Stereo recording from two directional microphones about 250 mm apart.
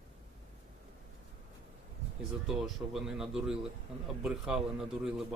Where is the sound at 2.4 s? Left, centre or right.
Centre.